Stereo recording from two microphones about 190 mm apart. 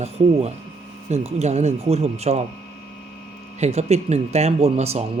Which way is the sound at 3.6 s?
35° right (ahead or behind).